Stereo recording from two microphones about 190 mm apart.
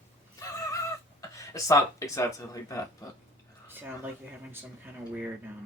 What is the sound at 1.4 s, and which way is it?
Speech, 15° left (ahead or behind).